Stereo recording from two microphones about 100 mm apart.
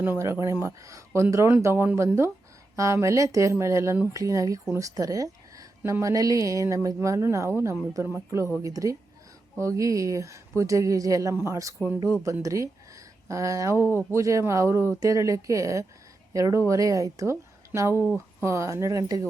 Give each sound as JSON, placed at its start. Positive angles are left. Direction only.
{"t": 0.0, "sound": "speech", "side_deg": -20}
{"t": 0.3, "sound": "speech", "side_deg": -30}
{"t": 18.4, "sound": "speech", "side_deg": -30}